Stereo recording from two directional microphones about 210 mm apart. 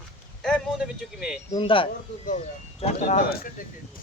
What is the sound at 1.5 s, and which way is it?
A man's voice, 25° left (ahead or behind).